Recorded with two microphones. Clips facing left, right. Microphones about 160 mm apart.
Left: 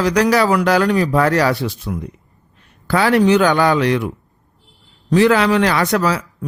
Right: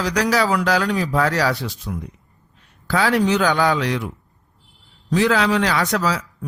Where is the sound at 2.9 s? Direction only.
60° left (ahead or behind).